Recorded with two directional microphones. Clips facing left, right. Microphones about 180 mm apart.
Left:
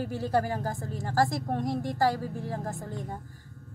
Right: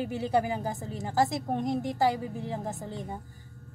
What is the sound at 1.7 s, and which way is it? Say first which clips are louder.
A woman's voice: even; centre (ahead or behind).